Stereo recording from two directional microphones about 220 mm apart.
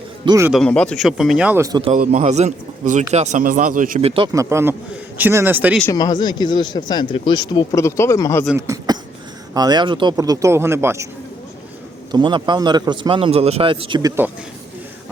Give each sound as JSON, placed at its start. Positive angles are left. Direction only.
{"t": 0.3, "sound": "a man's voice", "side_deg": -15}
{"t": 0.5, "sound": "speech", "side_deg": 5}
{"t": 2.0, "sound": "a man's voice", "side_deg": -35}
{"t": 4.1, "sound": "a man's voice", "side_deg": -20}
{"t": 5.8, "sound": "speech", "side_deg": 15}
{"t": 8.5, "sound": "a man's voice", "side_deg": -15}
{"t": 12.1, "sound": "a man's voice", "side_deg": -20}